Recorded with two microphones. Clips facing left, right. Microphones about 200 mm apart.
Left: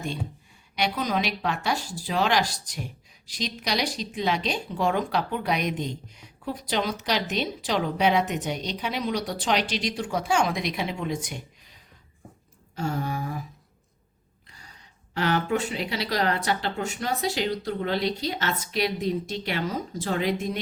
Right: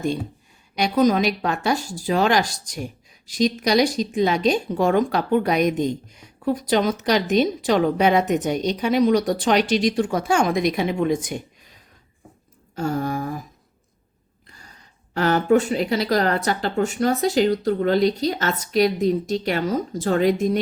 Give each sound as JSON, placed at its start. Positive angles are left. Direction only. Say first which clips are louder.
{"t": 0.8, "sound": "speech", "louder": "right 9 dB", "side_deg": -45}
{"t": 12.7, "sound": "speech", "louder": "right 5 dB", "side_deg": -45}
{"t": 15.1, "sound": "speech", "louder": "right 7 dB", "side_deg": -45}